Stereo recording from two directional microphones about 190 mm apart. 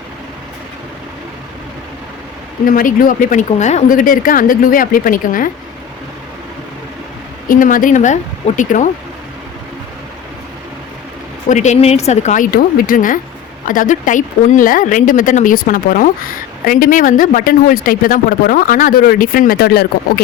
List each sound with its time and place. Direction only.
2.6 s speech: 45° left (ahead or behind)
7.4 s speech: 45° left (ahead or behind)
11.4 s speech: 40° left (ahead or behind); by 20.2 s 55° left (ahead or behind)